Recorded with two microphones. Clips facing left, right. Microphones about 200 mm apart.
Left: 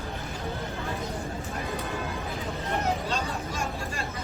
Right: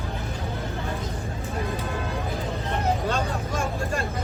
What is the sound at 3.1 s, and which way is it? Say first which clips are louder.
Speech: right 4 dB; 50° right (ahead or behind).